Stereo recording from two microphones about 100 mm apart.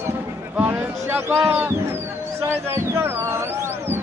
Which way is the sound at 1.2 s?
25° right (ahead or behind).